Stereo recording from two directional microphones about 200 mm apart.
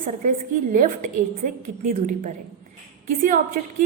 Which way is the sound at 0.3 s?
40° right (ahead or behind).